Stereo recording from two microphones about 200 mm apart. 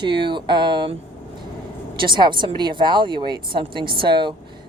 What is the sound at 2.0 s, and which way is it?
Speech, 25° right (ahead or behind).